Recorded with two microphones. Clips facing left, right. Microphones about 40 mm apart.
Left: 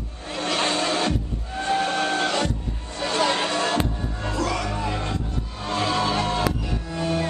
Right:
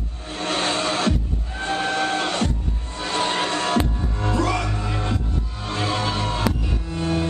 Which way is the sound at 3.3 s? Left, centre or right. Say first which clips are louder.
Right 1 dB; centre.